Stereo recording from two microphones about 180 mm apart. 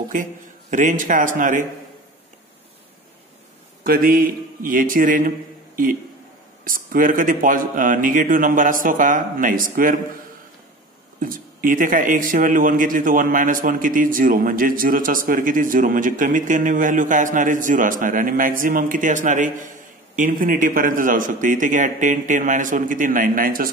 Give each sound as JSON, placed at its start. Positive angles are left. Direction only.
{"t": 0.1, "sound": "a man's voice", "side_deg": -45}
{"t": 3.8, "sound": "a man's voice", "side_deg": -55}
{"t": 6.6, "sound": "a man's voice", "side_deg": -50}
{"t": 11.1, "sound": "a man's voice", "side_deg": -50}